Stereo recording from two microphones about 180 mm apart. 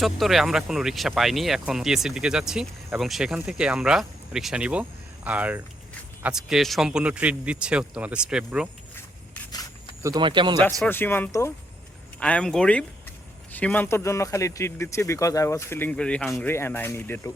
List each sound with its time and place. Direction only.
0.0 s speech: centre (ahead or behind)
9.5 s a sound: 20° left (ahead or behind)
10.0 s speech: 20° right (ahead or behind)
10.8 s a man's voice: 10° left (ahead or behind)
12.2 s a man's voice: 5° left (ahead or behind)